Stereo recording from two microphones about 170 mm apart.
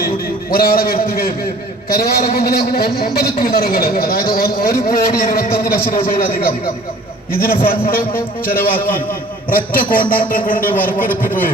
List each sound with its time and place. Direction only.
0.5 s a man's voice: 60° left (ahead or behind)